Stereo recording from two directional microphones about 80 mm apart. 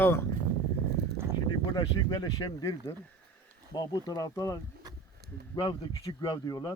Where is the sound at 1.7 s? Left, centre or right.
Left.